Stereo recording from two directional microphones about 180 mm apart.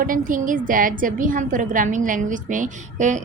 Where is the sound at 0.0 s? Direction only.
50° right (ahead or behind).